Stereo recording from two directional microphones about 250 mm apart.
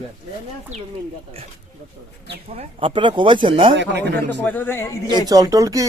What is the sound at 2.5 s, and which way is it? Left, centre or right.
Speech, right.